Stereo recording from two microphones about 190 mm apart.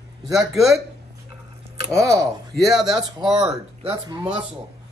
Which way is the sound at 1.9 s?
15° right (ahead or behind).